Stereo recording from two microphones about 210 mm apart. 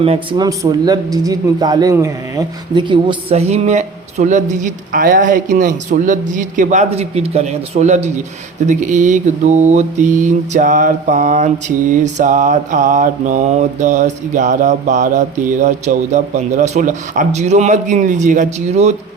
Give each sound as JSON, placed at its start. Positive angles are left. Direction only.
{"t": 0.0, "sound": "mantra", "side_deg": -25}